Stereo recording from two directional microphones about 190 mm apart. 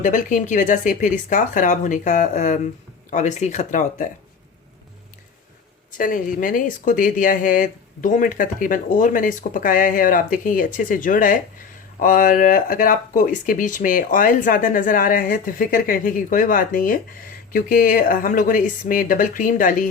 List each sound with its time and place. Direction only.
0.0 s speech: 45° left (ahead or behind)
6.0 s speech: 45° left (ahead or behind)